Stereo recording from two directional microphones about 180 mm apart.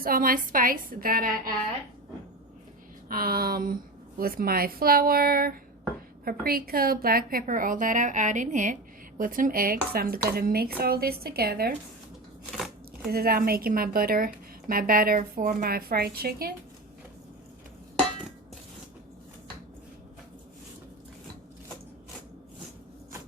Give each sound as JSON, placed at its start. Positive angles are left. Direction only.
{"t": 0.0, "sound": "a woman's voice", "side_deg": -55}
{"t": 3.1, "sound": "a woman's voice", "side_deg": -55}
{"t": 13.1, "sound": "a woman's voice", "side_deg": -60}